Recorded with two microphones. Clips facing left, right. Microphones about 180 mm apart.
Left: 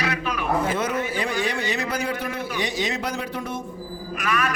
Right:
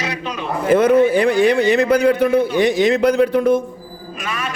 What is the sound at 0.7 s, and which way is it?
A man's voice, 60° right (ahead or behind).